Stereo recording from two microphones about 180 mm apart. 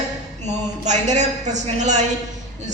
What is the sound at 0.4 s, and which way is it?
A woman's voice, 40° right (ahead or behind).